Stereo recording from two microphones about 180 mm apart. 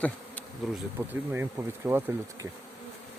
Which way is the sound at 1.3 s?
10° right (ahead or behind).